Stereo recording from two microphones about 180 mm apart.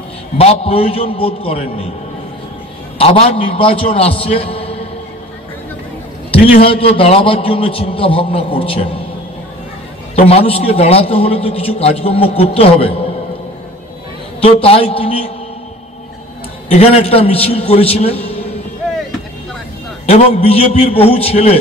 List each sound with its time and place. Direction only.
0.4 s a man's voice: 35° left (ahead or behind)
3.0 s a man's voice: 30° left (ahead or behind)
4.2 s a sound: 35° left (ahead or behind)
6.3 s a man's voice: 30° left (ahead or behind)
10.1 s a man's voice: 35° left (ahead or behind)
14.4 s a man's voice: 30° left (ahead or behind)
16.7 s a man's voice: 35° left (ahead or behind)
20.1 s a man's voice: 35° left (ahead or behind)